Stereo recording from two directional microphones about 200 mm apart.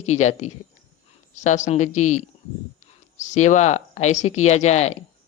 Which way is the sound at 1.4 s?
35° left (ahead or behind).